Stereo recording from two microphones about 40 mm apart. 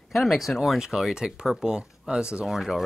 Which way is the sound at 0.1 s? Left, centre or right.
Centre.